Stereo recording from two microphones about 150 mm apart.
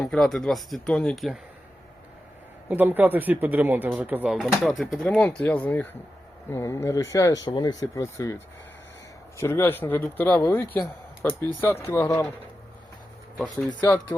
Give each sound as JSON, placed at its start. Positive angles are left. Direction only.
{"t": 0.0, "sound": "speech", "side_deg": 5}
{"t": 2.6, "sound": "speech", "side_deg": -10}
{"t": 9.4, "sound": "speech", "side_deg": 15}
{"t": 13.3, "sound": "speech", "side_deg": 10}